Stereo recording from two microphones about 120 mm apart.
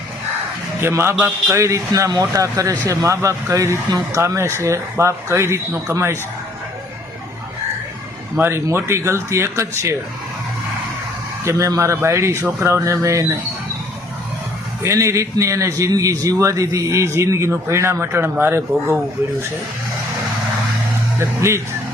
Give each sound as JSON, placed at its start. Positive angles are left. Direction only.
{"t": 0.8, "sound": "a man's voice", "side_deg": -20}
{"t": 1.1, "sound": "a man's voice", "side_deg": -10}
{"t": 1.5, "sound": "a man's voice", "side_deg": -25}
{"t": 8.4, "sound": "a man's voice", "side_deg": -20}
{"t": 11.4, "sound": "a man's voice", "side_deg": -25}
{"t": 14.8, "sound": "a man's voice", "side_deg": -25}
{"t": 21.2, "sound": "a man's voice", "side_deg": -25}